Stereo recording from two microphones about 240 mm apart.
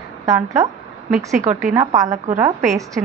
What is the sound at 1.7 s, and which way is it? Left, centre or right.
A woman's voice, centre.